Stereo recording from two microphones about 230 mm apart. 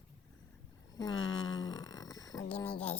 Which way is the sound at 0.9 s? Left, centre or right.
Centre.